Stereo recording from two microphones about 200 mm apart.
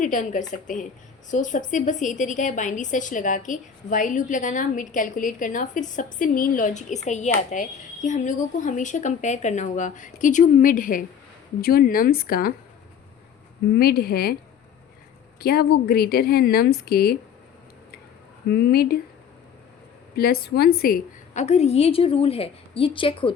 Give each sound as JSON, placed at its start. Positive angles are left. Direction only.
{"t": 0.0, "sound": "a woman's voice", "side_deg": 40}
{"t": 13.7, "sound": "a woman's voice", "side_deg": 50}
{"t": 15.4, "sound": "a woman's voice", "side_deg": 50}
{"t": 18.5, "sound": "a woman's voice", "side_deg": 50}
{"t": 20.1, "sound": "a woman's voice", "side_deg": 50}
{"t": 21.4, "sound": "a woman's voice", "side_deg": 30}